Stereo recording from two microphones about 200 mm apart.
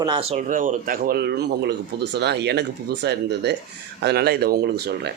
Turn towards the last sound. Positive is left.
turn(degrees=-55)  # may be behind; listen again after turning